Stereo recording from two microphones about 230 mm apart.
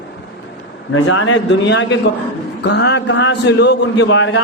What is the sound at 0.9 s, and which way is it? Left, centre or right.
A man's voice, left.